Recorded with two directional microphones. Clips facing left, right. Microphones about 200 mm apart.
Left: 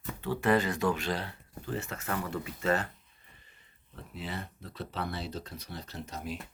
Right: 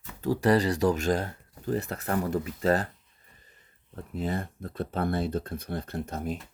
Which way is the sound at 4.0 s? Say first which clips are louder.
Right 8 dB; 45° right (ahead or behind).